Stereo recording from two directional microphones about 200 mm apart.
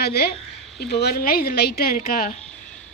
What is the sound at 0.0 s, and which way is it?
A woman's voice, 50° left (ahead or behind).